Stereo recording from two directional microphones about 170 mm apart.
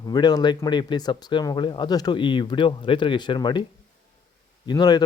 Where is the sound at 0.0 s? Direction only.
25° left (ahead or behind).